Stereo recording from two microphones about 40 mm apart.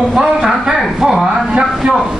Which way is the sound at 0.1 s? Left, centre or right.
Centre.